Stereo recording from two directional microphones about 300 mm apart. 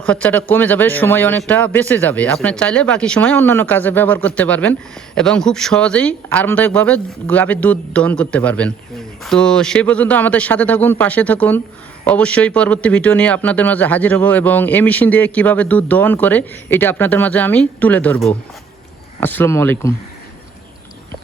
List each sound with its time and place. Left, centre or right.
0.0 s speech: centre